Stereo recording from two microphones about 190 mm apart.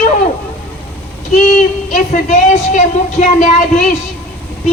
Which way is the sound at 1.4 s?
40° left (ahead or behind).